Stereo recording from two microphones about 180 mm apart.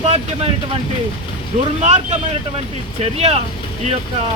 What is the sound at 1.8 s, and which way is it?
Speech, 40° right (ahead or behind).